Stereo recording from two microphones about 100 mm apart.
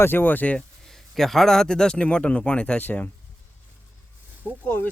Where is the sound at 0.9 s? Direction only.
5° left (ahead or behind).